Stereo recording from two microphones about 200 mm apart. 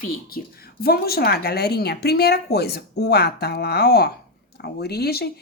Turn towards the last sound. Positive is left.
turn(degrees=50)  # may be behind; listen again after turning